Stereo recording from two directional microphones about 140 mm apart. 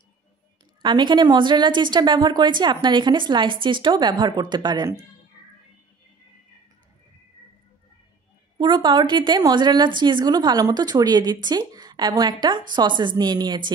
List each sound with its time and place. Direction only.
0.8 s a woman's voice: 35° right (ahead or behind)
8.5 s a woman's voice: 35° right (ahead or behind)